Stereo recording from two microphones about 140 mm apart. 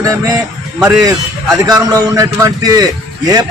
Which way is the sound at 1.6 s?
25° right (ahead or behind).